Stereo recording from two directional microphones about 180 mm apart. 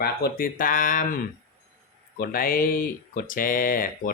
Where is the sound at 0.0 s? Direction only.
55° left (ahead or behind).